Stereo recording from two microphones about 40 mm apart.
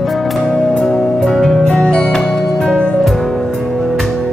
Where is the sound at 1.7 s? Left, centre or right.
Left.